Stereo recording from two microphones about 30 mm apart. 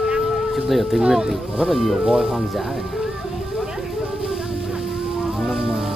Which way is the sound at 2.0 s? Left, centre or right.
Right.